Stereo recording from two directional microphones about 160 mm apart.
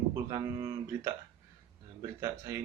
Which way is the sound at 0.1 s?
20° right (ahead or behind).